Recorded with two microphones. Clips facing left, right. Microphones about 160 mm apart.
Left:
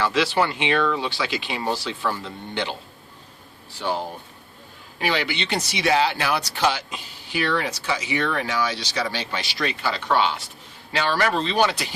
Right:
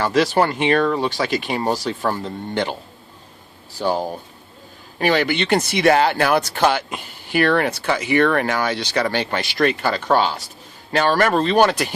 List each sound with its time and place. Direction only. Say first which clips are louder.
0.0 s speech: right 4 dB; 45° right (ahead or behind)
3.8 s speech: right 5 dB; 40° right (ahead or behind)